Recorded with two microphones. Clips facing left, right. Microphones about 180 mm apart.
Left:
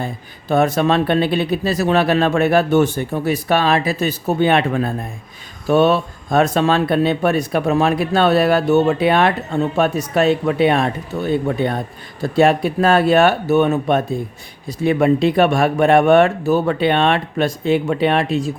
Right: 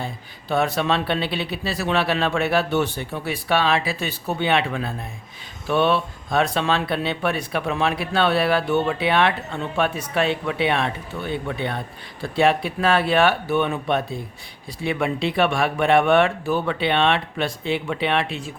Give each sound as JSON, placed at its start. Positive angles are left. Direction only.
{"t": 0.0, "sound": "speech", "side_deg": 45}